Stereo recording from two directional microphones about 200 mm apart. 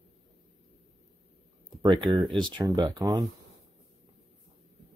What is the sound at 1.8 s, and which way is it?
Speech, 20° right (ahead or behind).